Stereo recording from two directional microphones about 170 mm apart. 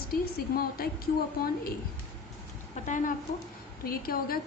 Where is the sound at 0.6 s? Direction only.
60° left (ahead or behind).